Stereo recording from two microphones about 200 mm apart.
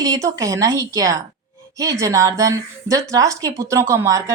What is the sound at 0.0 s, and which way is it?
Speech, 15° right (ahead or behind).